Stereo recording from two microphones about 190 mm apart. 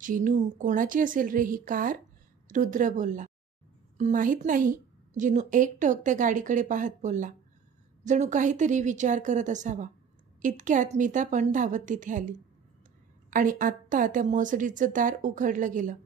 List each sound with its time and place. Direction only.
0.0 s a woman's voice: 40° right (ahead or behind)